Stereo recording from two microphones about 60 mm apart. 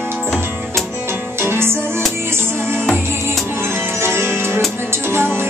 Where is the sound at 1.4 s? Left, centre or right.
Right.